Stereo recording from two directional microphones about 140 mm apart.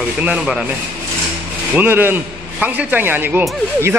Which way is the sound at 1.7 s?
15° right (ahead or behind).